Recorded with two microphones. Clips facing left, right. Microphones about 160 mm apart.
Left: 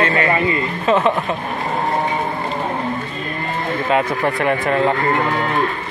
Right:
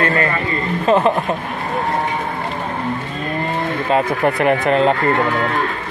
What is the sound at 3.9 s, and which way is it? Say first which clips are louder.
Speech: right 2 dB; 35° right (ahead or behind).